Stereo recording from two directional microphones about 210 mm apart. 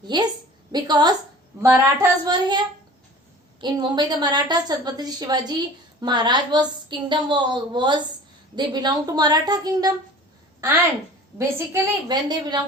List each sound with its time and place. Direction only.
0.1 s a woman's voice: 20° right (ahead or behind)
3.6 s a woman's voice: 20° right (ahead or behind)
11.3 s a woman's voice: 15° right (ahead or behind)